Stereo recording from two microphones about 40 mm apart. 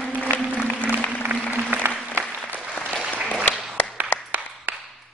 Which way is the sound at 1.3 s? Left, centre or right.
Right.